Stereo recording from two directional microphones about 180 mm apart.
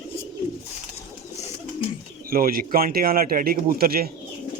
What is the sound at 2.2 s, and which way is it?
A man's voice, 55° right (ahead or behind).